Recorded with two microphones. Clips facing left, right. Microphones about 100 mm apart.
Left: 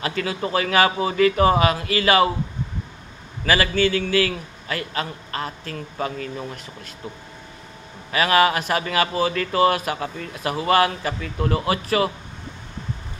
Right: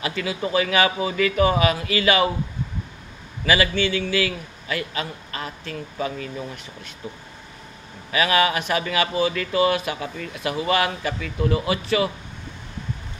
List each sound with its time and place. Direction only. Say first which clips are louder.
0.0 s a man's voice: left 1 dB; 40° left (ahead or behind)
3.4 s a man's voice: left 1 dB; 40° left (ahead or behind)
8.1 s a man's voice: left 2 dB; 40° left (ahead or behind)